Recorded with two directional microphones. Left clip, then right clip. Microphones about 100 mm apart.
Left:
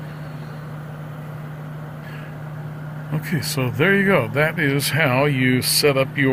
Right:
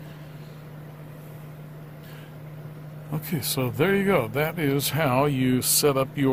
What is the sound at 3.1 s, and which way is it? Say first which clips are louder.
Speech: left 4 dB; 40° right (ahead or behind).